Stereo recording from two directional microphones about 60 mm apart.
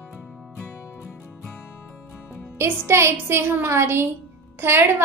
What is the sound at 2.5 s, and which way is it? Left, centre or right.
A woman's voice, right.